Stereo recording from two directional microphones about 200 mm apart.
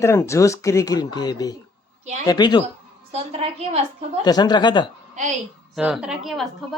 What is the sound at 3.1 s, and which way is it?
Speech, 30° right (ahead or behind).